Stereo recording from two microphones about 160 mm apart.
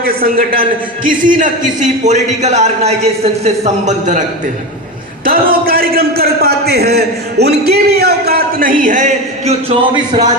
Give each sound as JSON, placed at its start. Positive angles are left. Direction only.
{"t": 0.0, "sound": "a man's voice", "side_deg": -70}
{"t": 5.2, "sound": "a man's voice", "side_deg": -65}